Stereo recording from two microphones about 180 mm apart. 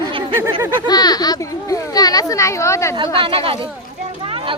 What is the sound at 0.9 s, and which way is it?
Speech, 20° left (ahead or behind).